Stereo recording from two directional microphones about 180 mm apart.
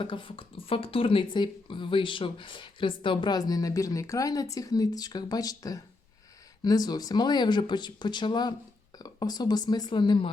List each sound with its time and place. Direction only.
0.0 s speech: 30° left (ahead or behind)